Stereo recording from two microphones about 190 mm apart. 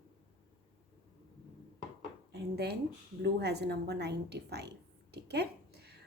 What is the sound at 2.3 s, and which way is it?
Speech, 60° right (ahead or behind).